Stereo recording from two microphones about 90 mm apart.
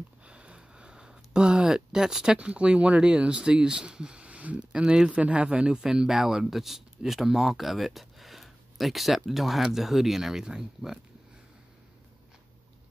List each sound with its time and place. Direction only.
0.2 s speech: 10° right (ahead or behind)